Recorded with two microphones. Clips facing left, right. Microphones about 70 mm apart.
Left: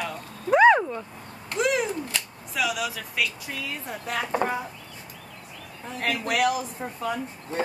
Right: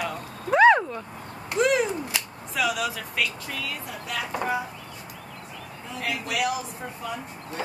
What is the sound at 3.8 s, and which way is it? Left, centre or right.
Speech, left.